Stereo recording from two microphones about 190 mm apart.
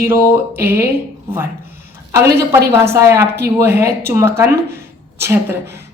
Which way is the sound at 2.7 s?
15° right (ahead or behind).